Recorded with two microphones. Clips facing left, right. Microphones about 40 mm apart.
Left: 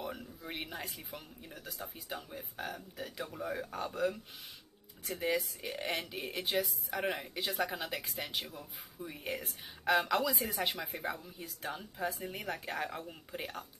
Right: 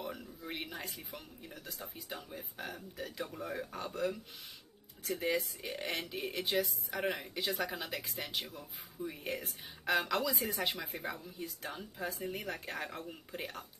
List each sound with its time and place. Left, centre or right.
0.0 s speech: centre